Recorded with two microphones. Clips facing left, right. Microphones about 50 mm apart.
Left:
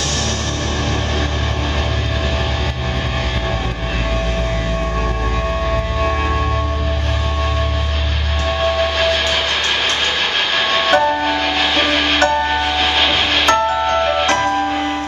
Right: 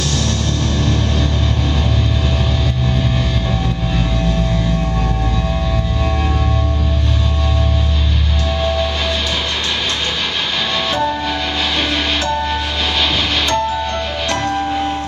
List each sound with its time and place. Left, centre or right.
8.5 s train: left
10.7 s music: left
13.5 s music: left